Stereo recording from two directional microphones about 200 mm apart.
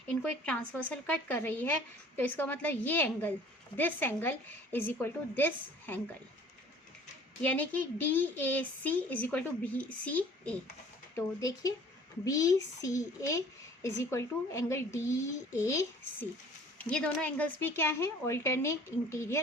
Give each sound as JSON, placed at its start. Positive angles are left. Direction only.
{"t": 0.1, "sound": "a woman's voice", "side_deg": 5}
{"t": 7.4, "sound": "a woman's voice", "side_deg": 10}